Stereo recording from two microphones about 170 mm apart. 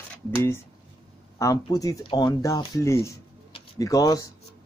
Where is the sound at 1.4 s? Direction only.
20° left (ahead or behind).